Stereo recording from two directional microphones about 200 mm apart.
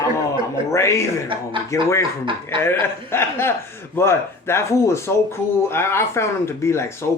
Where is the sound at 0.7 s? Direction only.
15° left (ahead or behind).